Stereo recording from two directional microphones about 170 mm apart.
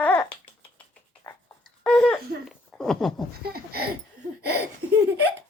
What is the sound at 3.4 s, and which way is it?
Speech, 65° right (ahead or behind).